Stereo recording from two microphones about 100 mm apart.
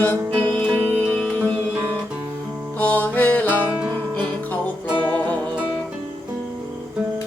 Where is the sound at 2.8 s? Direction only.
15° left (ahead or behind).